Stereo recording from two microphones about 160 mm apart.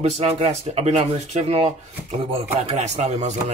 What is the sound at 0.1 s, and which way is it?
Speech, 40° right (ahead or behind).